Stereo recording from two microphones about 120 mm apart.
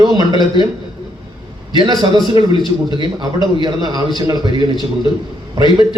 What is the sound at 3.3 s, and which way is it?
A man's voice, 35° right (ahead or behind).